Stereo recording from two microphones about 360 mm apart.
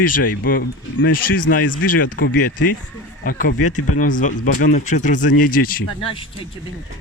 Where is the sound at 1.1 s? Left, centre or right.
Left.